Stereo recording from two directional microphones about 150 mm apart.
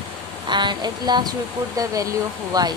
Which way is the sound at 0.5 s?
30° right (ahead or behind).